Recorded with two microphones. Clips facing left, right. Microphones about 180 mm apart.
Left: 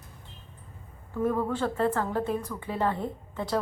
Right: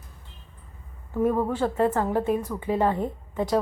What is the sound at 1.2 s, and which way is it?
Speech, 15° right (ahead or behind).